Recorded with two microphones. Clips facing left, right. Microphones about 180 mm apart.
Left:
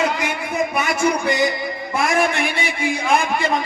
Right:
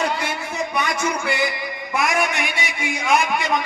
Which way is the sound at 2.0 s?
30° left (ahead or behind).